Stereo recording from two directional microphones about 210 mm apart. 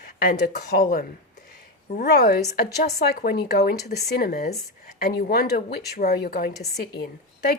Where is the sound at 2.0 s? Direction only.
50° left (ahead or behind).